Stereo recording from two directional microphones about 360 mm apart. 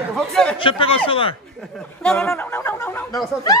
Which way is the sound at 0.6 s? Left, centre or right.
Centre.